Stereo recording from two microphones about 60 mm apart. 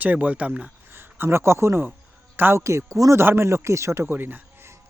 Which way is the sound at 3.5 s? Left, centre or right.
Right.